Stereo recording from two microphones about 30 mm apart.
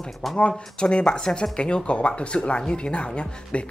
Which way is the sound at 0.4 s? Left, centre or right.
Left.